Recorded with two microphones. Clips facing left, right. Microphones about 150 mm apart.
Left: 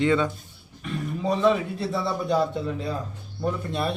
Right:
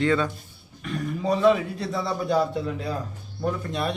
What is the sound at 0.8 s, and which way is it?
Speech, centre (ahead or behind).